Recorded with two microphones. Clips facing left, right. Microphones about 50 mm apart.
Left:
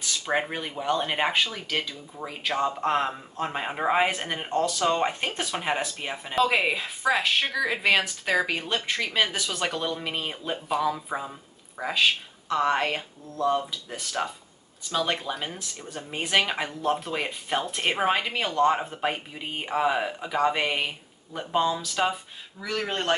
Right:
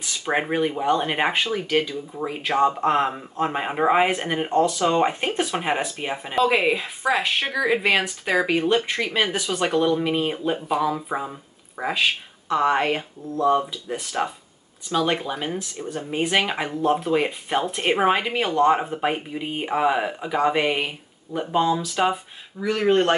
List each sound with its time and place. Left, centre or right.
0.0 s speech: centre
15.8 s speech: right
16.2 s speech: centre